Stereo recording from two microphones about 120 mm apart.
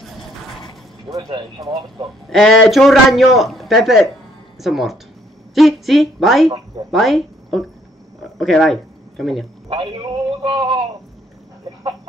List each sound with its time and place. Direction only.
0.0 s a sound: centre (ahead or behind)
1.1 s a man's voice: 30° right (ahead or behind)
2.2 s speech: 5° left (ahead or behind)
9.7 s a man's voice: 40° right (ahead or behind)